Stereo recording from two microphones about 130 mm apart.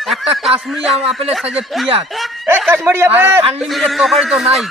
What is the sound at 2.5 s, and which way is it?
Speech, 15° right (ahead or behind).